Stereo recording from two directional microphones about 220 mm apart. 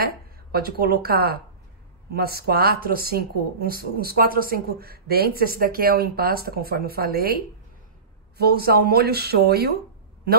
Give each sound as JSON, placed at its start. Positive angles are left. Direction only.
{"t": 0.0, "sound": "a woman's voice", "side_deg": -45}